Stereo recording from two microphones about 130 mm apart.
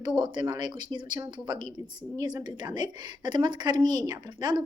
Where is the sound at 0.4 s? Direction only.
35° right (ahead or behind).